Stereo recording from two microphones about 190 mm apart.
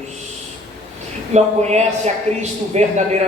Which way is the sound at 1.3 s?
35° right (ahead or behind).